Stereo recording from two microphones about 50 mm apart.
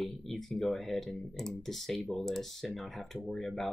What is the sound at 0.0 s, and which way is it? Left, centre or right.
Speech, centre.